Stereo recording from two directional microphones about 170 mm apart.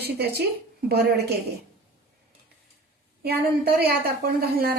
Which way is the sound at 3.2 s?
65° right (ahead or behind).